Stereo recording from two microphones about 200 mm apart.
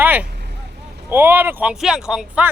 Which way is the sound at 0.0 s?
10° right (ahead or behind).